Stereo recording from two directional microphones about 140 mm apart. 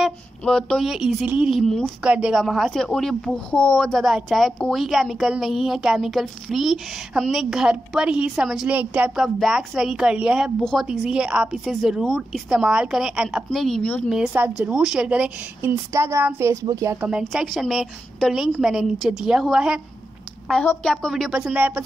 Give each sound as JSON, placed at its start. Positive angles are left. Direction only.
{"t": 0.0, "sound": "a woman's voice", "side_deg": 5}
{"t": 14.3, "sound": "a woman's voice", "side_deg": -10}
{"t": 17.2, "sound": "speech", "side_deg": 0}
{"t": 20.8, "sound": "speech", "side_deg": 5}